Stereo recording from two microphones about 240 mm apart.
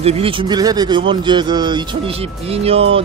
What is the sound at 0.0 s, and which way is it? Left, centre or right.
Speech, right.